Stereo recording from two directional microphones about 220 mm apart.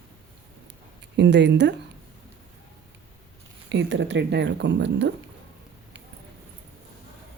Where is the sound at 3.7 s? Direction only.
55° right (ahead or behind).